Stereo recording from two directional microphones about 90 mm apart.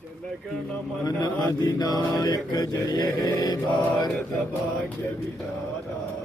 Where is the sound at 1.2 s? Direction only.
45° left (ahead or behind).